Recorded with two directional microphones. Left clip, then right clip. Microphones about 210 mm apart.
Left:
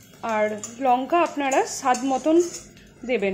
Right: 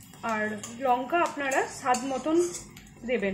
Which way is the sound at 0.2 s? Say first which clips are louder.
Left 6 dB; 25° left (ahead or behind).